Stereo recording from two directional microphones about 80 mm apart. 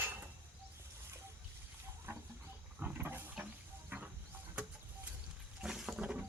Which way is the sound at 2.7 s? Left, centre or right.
Right.